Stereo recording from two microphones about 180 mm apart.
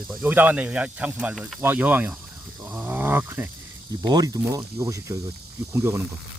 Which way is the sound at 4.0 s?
20° right (ahead or behind).